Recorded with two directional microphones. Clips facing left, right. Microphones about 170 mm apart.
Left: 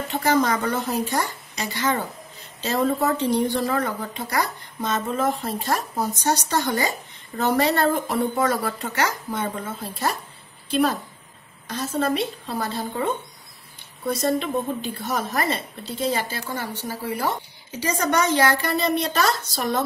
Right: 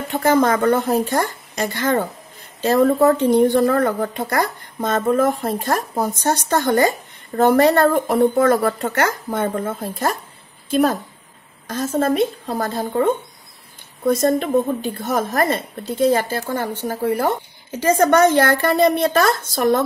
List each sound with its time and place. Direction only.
0.1 s a woman's voice: 55° right (ahead or behind)